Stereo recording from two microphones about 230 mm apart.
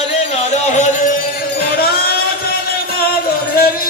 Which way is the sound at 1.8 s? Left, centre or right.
Left.